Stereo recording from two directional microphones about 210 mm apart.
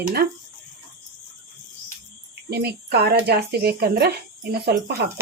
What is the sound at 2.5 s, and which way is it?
Speech, 50° right (ahead or behind).